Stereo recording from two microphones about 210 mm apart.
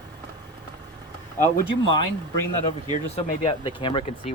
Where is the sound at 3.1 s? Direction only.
25° left (ahead or behind).